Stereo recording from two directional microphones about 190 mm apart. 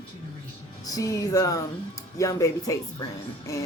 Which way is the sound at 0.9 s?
20° left (ahead or behind).